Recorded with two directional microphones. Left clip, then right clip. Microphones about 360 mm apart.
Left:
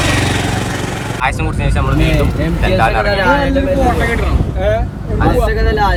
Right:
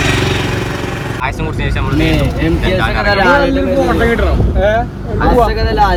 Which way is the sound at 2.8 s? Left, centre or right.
Centre.